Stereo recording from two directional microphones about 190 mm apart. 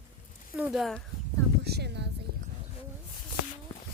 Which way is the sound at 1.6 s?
60° right (ahead or behind).